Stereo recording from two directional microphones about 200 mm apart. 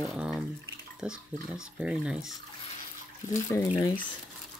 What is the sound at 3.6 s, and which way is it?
Speech, 30° left (ahead or behind).